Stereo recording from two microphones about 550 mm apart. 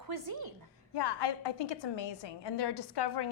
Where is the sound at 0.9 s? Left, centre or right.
Left.